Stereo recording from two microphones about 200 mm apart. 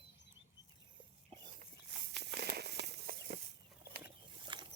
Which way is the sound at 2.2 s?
55° right (ahead or behind).